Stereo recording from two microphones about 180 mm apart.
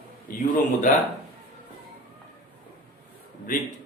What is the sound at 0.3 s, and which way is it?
Speech, 50° left (ahead or behind).